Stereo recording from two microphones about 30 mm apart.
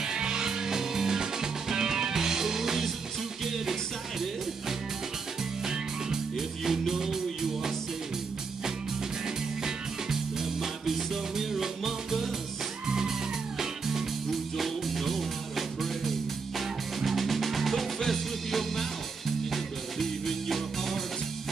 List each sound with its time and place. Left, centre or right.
0.0 s music: right
5.7 s music: centre
9.6 s music: centre
13.6 s music: centre
14.6 s music: centre